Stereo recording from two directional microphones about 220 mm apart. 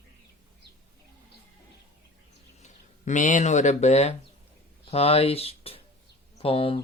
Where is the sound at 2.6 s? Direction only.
35° left (ahead or behind).